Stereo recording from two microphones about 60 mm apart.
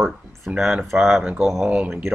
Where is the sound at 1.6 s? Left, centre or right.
Centre.